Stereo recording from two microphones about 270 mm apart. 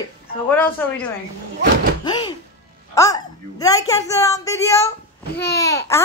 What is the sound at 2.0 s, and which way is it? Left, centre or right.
A woman's voice, centre.